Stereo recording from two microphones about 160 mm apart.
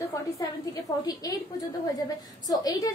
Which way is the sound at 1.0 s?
25° left (ahead or behind).